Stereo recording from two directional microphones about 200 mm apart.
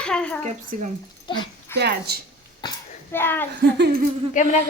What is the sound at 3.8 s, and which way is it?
Speech, 50° right (ahead or behind).